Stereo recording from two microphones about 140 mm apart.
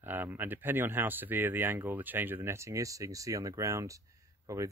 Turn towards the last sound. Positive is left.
turn(degrees=-25)  # may be behind; listen again after turning